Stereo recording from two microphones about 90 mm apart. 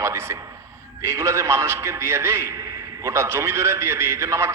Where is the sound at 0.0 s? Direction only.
30° right (ahead or behind).